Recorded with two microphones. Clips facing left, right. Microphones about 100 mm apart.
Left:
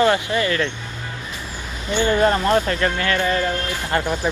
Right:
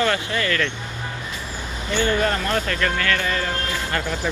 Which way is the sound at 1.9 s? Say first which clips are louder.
Left 4 dB; 25° left (ahead or behind).